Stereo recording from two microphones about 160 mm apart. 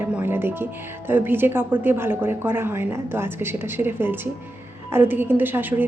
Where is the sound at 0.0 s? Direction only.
10° right (ahead or behind).